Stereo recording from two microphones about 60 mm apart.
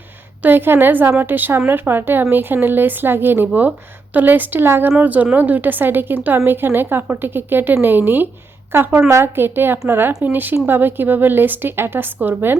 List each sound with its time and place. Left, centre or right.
0.4 s a woman's voice: right